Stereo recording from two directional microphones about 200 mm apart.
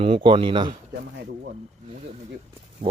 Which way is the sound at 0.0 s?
30° right (ahead or behind).